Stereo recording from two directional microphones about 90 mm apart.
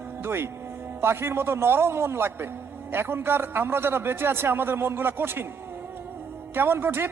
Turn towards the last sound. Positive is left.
turn(degrees=-25)  # may be behind; listen again after turning